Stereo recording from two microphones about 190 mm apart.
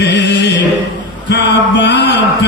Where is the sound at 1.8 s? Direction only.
65° left (ahead or behind).